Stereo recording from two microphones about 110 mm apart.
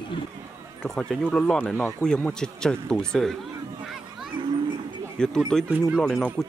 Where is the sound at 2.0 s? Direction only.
5° left (ahead or behind).